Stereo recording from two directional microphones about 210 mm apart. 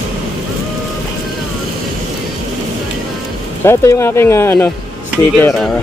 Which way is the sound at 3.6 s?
15° left (ahead or behind).